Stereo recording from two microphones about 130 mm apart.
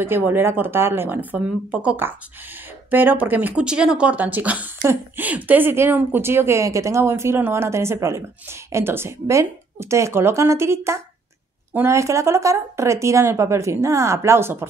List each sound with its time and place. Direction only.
0.0 s speech: 15° right (ahead or behind)